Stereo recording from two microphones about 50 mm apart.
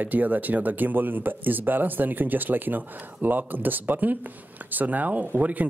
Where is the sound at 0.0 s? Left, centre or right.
Right.